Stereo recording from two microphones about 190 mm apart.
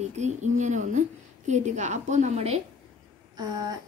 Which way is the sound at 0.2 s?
40° right (ahead or behind).